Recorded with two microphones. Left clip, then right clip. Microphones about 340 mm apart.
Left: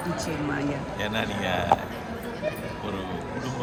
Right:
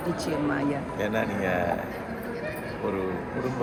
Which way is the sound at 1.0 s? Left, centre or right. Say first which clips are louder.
Right 1 dB; left.